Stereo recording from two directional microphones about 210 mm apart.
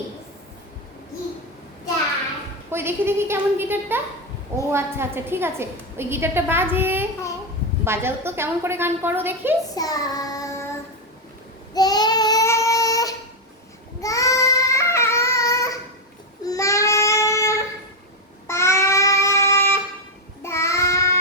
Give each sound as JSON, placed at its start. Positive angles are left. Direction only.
{"t": 2.6, "sound": "a woman's voice", "side_deg": -10}
{"t": 9.7, "sound": "child singing", "side_deg": 15}
{"t": 14.0, "sound": "a sound", "side_deg": 15}
{"t": 16.4, "sound": "child singing", "side_deg": 15}